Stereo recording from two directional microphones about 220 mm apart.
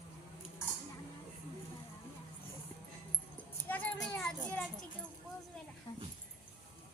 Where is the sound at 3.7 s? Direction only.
5° left (ahead or behind).